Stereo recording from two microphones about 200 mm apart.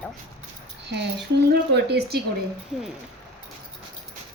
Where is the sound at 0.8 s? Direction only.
55° right (ahead or behind).